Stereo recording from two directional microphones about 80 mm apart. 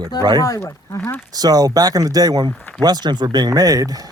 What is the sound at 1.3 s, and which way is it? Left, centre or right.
Speech, right.